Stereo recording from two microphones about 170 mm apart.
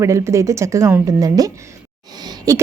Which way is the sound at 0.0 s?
15° right (ahead or behind).